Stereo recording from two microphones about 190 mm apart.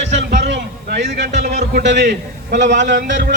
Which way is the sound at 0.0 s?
65° right (ahead or behind).